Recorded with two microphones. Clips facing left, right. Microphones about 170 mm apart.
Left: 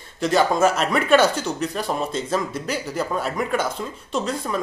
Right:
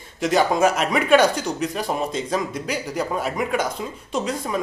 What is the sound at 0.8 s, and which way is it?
Speech, 5° right (ahead or behind).